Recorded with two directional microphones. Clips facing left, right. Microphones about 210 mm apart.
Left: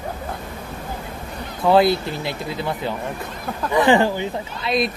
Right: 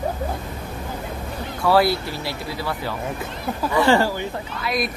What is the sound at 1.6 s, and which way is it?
Speech, 20° left (ahead or behind).